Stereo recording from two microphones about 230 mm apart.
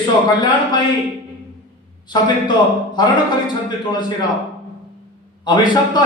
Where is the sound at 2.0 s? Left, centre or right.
Centre.